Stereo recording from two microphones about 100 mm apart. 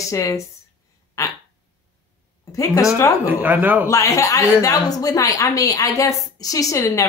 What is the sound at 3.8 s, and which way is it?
A woman's voice, 35° left (ahead or behind).